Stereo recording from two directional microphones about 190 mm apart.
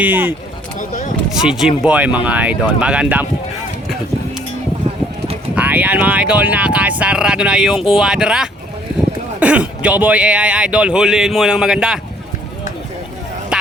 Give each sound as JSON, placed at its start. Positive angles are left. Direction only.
{"t": 0.0, "sound": "speech", "side_deg": -10}
{"t": 0.8, "sound": "speech", "side_deg": 45}
{"t": 1.3, "sound": "speech", "side_deg": -5}
{"t": 5.5, "sound": "speech", "side_deg": -10}
{"t": 13.5, "sound": "a sound", "side_deg": -5}